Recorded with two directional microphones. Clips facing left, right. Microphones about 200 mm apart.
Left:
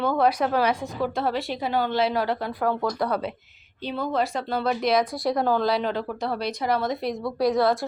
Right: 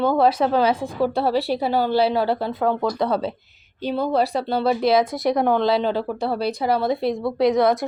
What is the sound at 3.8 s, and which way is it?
A woman's voice, 40° right (ahead or behind).